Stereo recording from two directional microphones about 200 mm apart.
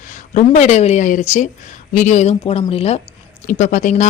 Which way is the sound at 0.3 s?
35° left (ahead or behind).